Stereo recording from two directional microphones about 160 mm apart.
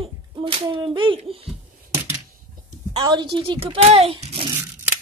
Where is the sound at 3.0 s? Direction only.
25° right (ahead or behind).